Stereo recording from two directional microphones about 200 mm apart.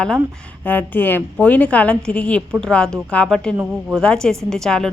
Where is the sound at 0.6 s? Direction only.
10° left (ahead or behind).